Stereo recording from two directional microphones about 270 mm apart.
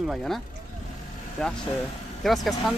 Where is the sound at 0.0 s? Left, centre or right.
Centre.